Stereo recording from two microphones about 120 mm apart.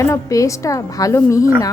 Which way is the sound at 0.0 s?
25° left (ahead or behind).